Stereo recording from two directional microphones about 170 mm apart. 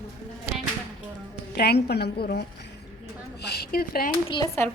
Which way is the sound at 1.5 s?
70° left (ahead or behind).